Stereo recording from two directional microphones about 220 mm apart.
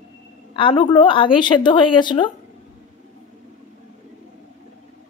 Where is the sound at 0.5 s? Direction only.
25° left (ahead or behind).